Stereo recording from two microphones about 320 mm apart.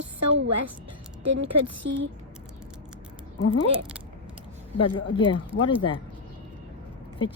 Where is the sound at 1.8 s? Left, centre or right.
Right.